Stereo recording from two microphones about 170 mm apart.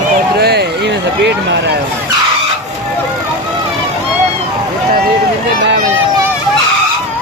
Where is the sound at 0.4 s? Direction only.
70° right (ahead or behind).